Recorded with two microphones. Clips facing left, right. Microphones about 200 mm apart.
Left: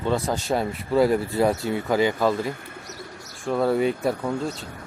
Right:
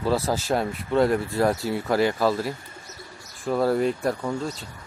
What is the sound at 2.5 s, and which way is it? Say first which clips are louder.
Bird: left 2 dB; 60° left (ahead or behind).